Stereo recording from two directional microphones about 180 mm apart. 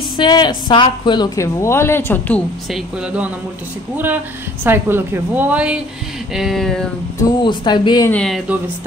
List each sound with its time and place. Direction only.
0.2 s a woman's voice: 25° left (ahead or behind); by 2.8 s 10° left (ahead or behind)
3.9 s a woman's voice: 10° right (ahead or behind)
7.2 s speech: 25° left (ahead or behind)
8.1 s speech: 5° left (ahead or behind)